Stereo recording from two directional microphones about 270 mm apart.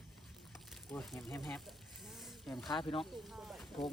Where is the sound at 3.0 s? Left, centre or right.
Centre.